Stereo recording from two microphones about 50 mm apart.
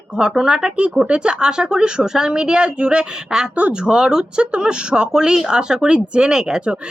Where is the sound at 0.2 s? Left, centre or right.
Centre.